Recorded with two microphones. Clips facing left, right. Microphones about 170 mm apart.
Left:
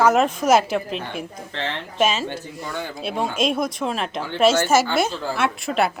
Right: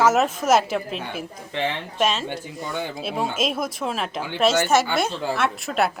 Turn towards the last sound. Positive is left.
turn(degrees=0)  # may be behind; listen again after turning